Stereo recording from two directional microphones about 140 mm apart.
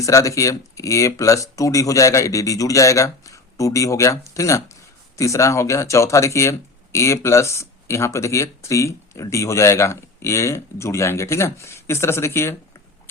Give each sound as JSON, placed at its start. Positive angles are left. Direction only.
{"t": 0.0, "sound": "speech", "side_deg": 25}